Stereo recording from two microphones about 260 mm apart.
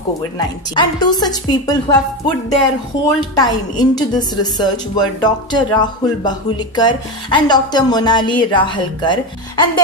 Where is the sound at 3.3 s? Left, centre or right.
Centre.